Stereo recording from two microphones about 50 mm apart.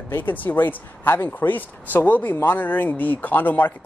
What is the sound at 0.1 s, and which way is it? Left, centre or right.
Speech, left.